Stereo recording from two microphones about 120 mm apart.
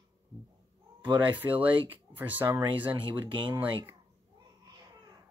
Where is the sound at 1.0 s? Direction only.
40° right (ahead or behind).